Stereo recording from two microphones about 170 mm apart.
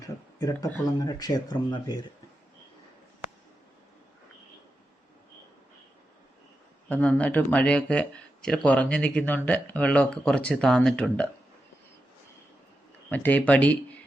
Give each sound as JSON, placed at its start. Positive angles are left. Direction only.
{"t": 0.0, "sound": "a sound", "side_deg": 20}
{"t": 0.7, "sound": "speech", "side_deg": 20}
{"t": 6.8, "sound": "speech", "side_deg": 5}
{"t": 13.1, "sound": "speech", "side_deg": 10}